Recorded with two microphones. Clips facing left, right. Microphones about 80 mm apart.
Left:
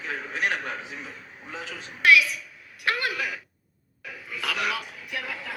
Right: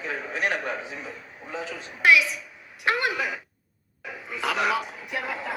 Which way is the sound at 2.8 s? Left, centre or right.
Centre.